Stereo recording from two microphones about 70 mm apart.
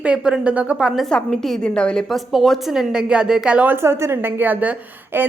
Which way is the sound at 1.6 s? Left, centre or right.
Centre.